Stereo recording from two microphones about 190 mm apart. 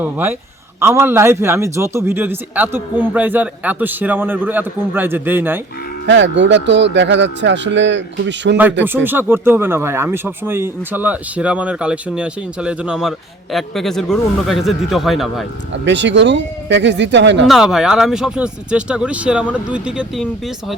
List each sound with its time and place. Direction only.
0.0 s a man's voice: 10° right (ahead or behind)
6.1 s speech: 75° right (ahead or behind)
9.0 s speech: 10° right (ahead or behind)
15.7 s speech: 70° right (ahead or behind)
17.4 s speech: centre (ahead or behind)